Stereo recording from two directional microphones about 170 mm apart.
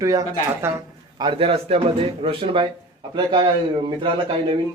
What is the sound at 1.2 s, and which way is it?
A man's voice, 30° right (ahead or behind).